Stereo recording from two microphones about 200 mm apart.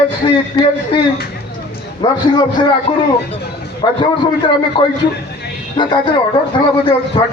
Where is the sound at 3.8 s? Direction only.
20° left (ahead or behind).